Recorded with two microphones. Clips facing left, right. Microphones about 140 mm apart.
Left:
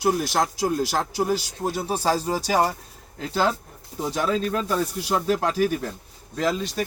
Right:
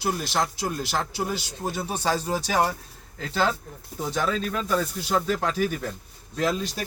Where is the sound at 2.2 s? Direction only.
35° left (ahead or behind).